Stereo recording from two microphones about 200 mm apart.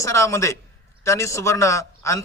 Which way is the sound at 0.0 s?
15° left (ahead or behind).